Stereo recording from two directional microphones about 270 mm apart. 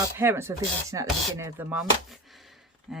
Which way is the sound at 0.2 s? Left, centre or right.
Centre.